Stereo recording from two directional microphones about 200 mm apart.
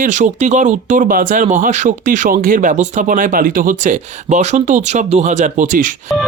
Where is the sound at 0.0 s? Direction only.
40° right (ahead or behind).